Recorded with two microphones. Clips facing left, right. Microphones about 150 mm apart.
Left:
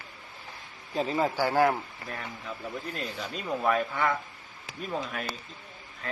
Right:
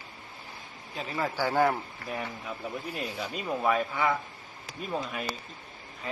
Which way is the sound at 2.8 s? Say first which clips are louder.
Right 1 dB; 10° right (ahead or behind).